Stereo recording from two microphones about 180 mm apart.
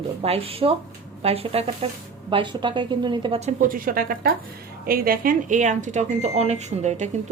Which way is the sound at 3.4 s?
50° right (ahead or behind).